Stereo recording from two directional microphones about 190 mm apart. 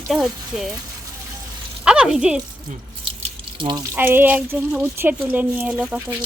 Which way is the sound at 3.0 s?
25° right (ahead or behind).